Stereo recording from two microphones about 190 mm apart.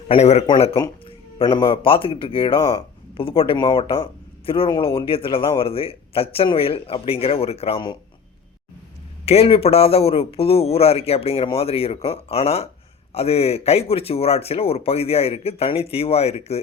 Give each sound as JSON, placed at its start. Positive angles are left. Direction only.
{"t": 0.1, "sound": "speech", "side_deg": 35}
{"t": 9.2, "sound": "speech", "side_deg": 30}